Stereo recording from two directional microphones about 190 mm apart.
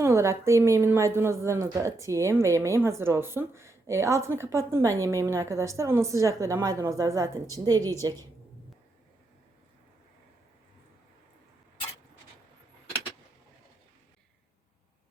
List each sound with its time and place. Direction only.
0.0 s a woman's voice: 15° right (ahead or behind)